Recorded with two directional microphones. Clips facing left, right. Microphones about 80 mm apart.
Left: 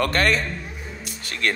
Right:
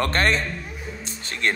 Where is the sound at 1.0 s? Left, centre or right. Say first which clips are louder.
Even; right.